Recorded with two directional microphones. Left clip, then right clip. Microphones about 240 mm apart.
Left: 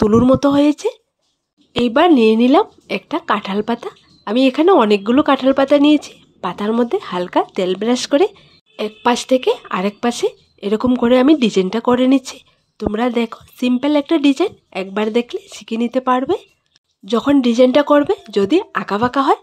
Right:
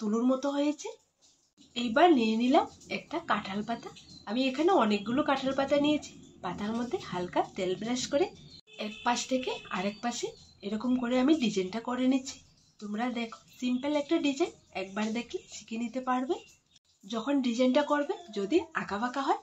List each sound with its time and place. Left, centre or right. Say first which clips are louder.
0.0 s speech: left 17 dB; left